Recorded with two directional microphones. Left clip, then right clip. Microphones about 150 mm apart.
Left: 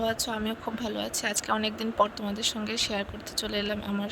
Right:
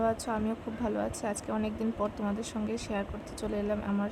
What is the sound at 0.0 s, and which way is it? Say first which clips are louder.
Speech: left 1 dB; 55° left (ahead or behind).